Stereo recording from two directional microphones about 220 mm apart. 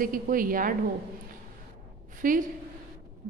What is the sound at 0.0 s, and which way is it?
Speech, 40° right (ahead or behind).